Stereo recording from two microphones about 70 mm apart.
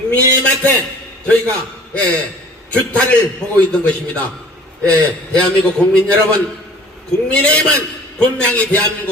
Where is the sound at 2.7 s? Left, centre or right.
Centre.